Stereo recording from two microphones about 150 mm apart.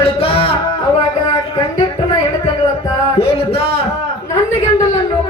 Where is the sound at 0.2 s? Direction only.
40° left (ahead or behind).